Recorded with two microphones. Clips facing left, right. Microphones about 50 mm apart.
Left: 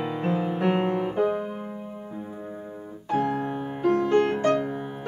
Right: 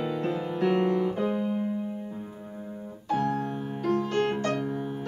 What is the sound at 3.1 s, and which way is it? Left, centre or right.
Music, left.